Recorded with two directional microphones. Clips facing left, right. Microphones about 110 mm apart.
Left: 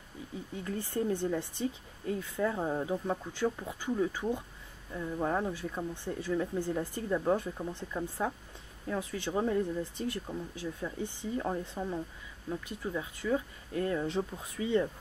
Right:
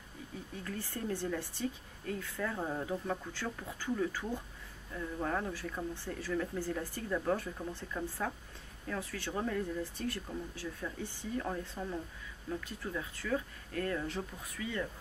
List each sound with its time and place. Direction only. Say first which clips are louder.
0.7 s speech: left 6 dB; 20° left (ahead or behind)